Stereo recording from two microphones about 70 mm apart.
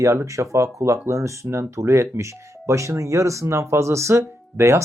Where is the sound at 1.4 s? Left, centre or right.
Right.